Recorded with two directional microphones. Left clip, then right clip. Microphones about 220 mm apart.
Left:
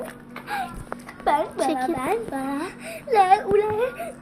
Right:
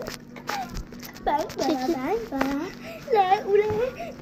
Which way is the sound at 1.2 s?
20° left (ahead or behind).